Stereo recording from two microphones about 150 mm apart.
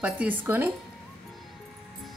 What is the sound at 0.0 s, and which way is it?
Speech, 10° right (ahead or behind).